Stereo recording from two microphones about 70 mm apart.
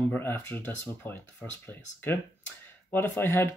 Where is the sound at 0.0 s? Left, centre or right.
Left.